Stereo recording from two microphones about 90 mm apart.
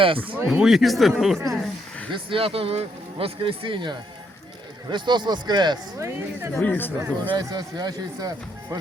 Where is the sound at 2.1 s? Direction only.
85° right; by 6.0 s 50° right (ahead or behind).